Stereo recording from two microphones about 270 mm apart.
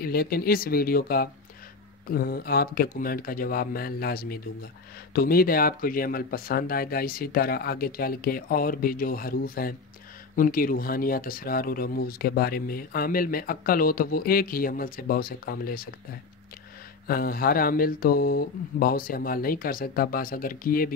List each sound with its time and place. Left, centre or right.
0.0 s speech: left
17.1 s speech: left